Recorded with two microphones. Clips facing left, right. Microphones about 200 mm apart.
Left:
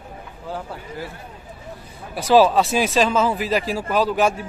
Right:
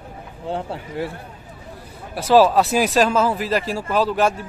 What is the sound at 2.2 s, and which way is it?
Speech, 5° right (ahead or behind).